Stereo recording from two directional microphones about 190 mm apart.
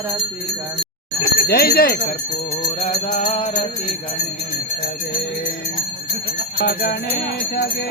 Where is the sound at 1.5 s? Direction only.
55° left (ahead or behind).